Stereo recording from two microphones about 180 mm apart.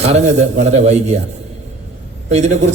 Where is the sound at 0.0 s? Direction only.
40° right (ahead or behind).